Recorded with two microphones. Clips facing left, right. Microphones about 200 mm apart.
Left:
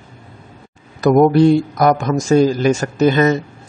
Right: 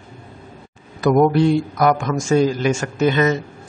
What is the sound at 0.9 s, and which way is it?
A man's voice, 40° left (ahead or behind).